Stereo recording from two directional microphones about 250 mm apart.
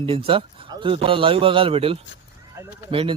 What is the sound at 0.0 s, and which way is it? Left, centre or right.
Speech, right.